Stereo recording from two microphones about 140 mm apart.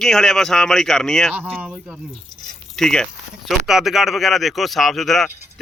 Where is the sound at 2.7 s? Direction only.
5° left (ahead or behind).